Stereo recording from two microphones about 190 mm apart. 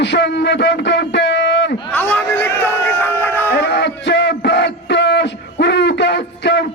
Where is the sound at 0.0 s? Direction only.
65° left (ahead or behind).